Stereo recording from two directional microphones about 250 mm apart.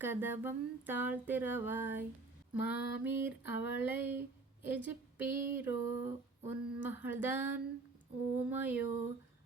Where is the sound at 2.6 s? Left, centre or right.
Left.